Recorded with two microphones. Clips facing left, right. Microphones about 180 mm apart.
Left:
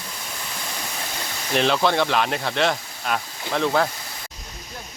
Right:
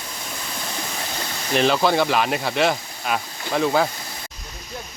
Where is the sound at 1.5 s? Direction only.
5° right (ahead or behind).